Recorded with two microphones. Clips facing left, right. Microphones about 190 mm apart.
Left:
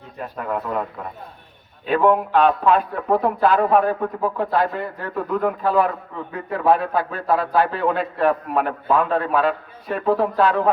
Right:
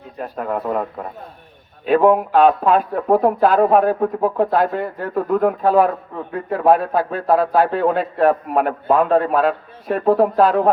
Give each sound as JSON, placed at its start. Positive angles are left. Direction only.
{"t": 0.2, "sound": "a man's voice", "side_deg": -40}
{"t": 2.3, "sound": "a man's voice", "side_deg": -45}